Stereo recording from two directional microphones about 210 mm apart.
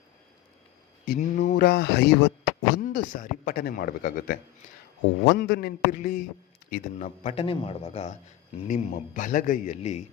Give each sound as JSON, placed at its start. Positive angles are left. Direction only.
{"t": 1.0, "sound": "speech", "side_deg": 40}
{"t": 2.8, "sound": "a man's voice", "side_deg": 40}
{"t": 5.2, "sound": "a man's voice", "side_deg": 55}